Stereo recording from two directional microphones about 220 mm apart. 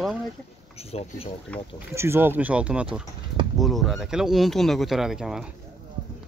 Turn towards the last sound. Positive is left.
turn(degrees=0)  # may be behind; listen again after turning